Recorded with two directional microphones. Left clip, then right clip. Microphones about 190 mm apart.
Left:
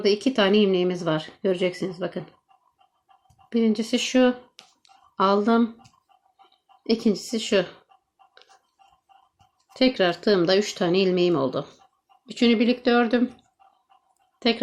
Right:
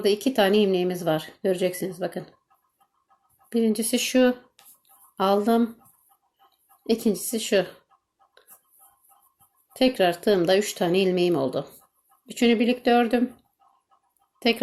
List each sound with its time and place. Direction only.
0.0 s speech: 5° left (ahead or behind)
3.5 s speech: 5° left (ahead or behind)
6.8 s speech: centre (ahead or behind)
9.7 s speech: 5° left (ahead or behind)
14.3 s a woman's voice: centre (ahead or behind)